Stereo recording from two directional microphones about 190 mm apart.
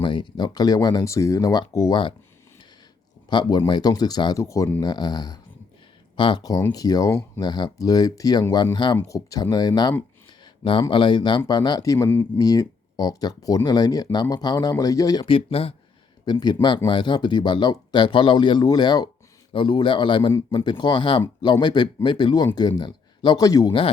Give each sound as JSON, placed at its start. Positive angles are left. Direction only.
{"t": 0.0, "sound": "speech", "side_deg": 25}
{"t": 3.2, "sound": "speech", "side_deg": 25}